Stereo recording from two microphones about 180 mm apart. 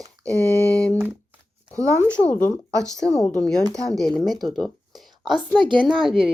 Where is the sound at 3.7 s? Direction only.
Centre (ahead or behind).